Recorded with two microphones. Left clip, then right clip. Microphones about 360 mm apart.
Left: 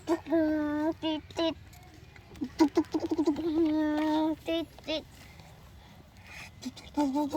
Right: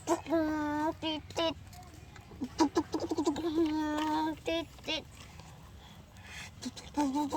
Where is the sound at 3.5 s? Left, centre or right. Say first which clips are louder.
Left 4 dB; centre.